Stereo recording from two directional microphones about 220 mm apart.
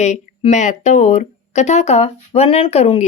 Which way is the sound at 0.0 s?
30° left (ahead or behind).